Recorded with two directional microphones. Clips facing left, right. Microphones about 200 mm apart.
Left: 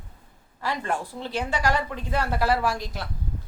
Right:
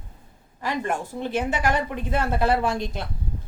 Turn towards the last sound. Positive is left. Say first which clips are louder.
# right 2 dB
turn(degrees=-20)  # may be behind; listen again after turning